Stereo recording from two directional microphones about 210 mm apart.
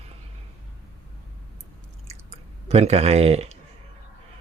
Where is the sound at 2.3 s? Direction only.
30° right (ahead or behind).